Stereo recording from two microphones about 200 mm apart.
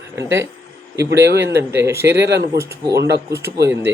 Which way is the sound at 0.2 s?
15° right (ahead or behind).